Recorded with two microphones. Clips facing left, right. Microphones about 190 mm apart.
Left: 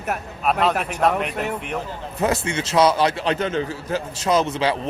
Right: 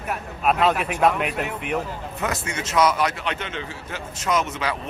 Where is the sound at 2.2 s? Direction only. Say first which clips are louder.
Left 7 dB; 30° left (ahead or behind).